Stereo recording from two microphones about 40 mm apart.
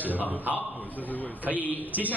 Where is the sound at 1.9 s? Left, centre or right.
Right.